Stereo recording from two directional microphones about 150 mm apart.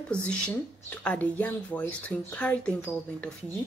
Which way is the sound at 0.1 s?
5° left (ahead or behind).